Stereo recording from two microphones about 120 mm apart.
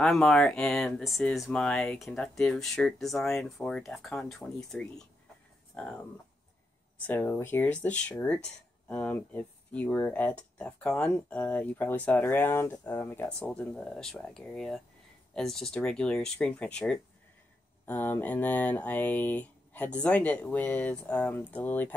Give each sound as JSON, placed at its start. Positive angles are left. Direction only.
{"t": 0.0, "sound": "speech", "side_deg": 0}
{"t": 7.0, "sound": "speech", "side_deg": 20}